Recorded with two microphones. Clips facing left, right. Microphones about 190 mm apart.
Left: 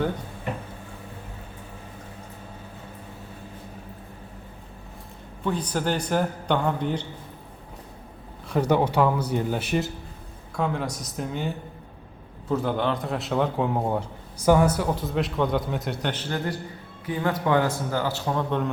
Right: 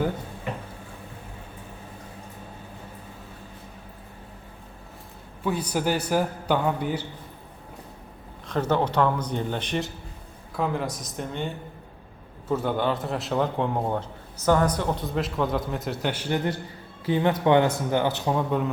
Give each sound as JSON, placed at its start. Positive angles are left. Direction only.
{"t": 5.4, "sound": "a man's voice", "side_deg": -10}
{"t": 8.4, "sound": "a man's voice", "side_deg": 10}
{"t": 17.1, "sound": "a man's voice", "side_deg": -25}